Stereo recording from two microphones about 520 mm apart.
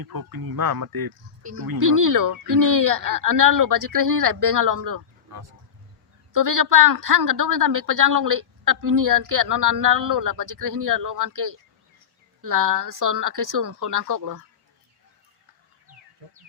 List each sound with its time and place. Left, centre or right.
0.0 s a woman's voice: right